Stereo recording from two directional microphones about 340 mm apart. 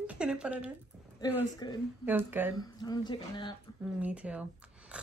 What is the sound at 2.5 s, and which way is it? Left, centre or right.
Speech, centre.